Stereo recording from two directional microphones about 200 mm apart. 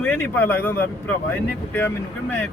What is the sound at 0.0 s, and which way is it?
Speech, 10° left (ahead or behind).